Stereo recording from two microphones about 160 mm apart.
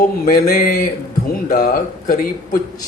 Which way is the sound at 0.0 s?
60° left (ahead or behind).